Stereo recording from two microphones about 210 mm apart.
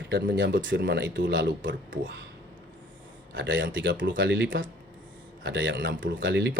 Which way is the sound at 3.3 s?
60° right (ahead or behind).